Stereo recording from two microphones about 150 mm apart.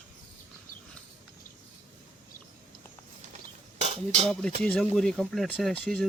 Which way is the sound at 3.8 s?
45° right (ahead or behind).